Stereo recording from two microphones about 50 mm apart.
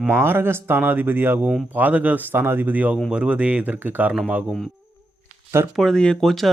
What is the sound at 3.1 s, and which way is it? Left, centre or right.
Speech, right.